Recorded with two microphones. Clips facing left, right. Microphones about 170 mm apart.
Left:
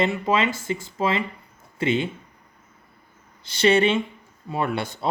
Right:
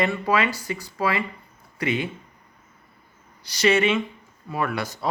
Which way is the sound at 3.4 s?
30° left (ahead or behind).